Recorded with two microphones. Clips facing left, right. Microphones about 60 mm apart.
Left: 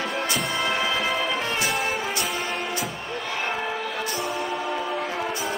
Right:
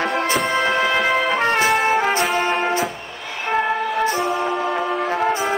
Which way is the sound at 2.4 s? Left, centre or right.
Right.